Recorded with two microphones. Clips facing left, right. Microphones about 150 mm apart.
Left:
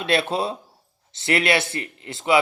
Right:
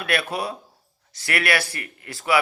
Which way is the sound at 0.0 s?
25° left (ahead or behind).